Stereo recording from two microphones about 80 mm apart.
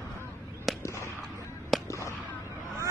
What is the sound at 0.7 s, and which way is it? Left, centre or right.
Fireworks, centre.